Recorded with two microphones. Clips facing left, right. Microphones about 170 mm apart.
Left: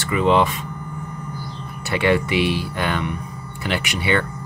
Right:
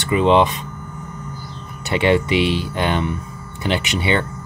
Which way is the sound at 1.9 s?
20° right (ahead or behind).